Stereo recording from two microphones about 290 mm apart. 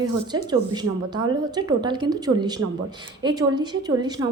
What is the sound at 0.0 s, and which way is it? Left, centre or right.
A woman's voice, centre.